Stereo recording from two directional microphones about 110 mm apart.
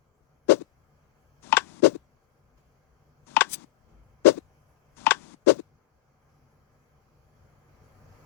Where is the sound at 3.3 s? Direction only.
20° left (ahead or behind).